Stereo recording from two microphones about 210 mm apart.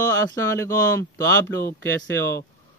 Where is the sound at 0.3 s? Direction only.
15° left (ahead or behind).